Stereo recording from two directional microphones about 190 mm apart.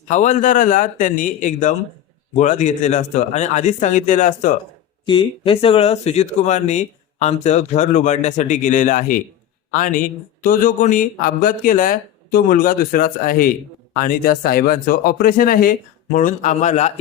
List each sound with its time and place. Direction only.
0.1 s speech: 40° left (ahead or behind)
5.0 s speech: 25° left (ahead or behind)